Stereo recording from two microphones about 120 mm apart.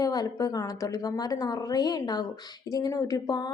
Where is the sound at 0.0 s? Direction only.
30° left (ahead or behind).